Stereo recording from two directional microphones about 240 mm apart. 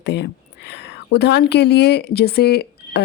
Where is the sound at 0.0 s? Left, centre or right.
Left.